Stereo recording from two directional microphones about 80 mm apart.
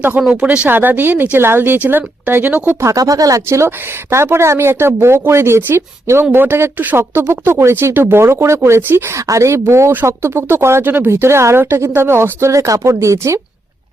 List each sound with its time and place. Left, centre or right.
0.2 s speech: centre
2.8 s speech: right